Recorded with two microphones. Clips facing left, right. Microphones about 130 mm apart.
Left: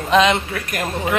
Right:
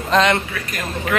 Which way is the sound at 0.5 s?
50° left (ahead or behind).